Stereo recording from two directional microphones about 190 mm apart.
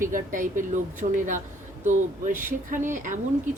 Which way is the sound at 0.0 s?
45° right (ahead or behind).